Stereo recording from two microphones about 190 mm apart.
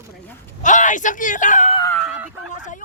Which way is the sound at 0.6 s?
40° left (ahead or behind).